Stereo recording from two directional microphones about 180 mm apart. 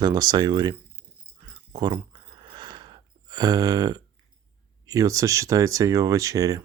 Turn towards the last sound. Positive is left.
turn(degrees=-20)  # may be behind; listen again after turning